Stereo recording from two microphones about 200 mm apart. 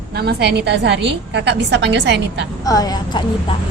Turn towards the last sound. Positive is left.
turn(degrees=20)  # may be behind; listen again after turning